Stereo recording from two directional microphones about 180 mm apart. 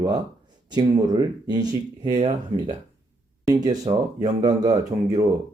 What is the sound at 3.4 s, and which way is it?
Speech, 20° right (ahead or behind).